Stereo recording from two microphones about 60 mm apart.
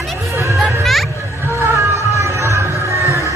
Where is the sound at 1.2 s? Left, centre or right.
Right.